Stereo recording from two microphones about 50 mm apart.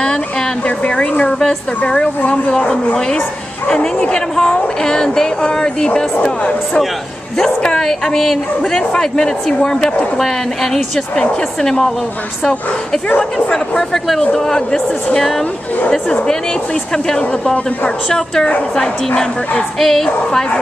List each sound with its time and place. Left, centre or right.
0.7 s a woman's voice: left
13.2 s a woman's voice: centre